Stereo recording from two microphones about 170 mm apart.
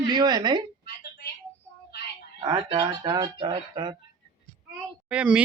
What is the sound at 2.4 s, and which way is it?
Speech, 25° right (ahead or behind).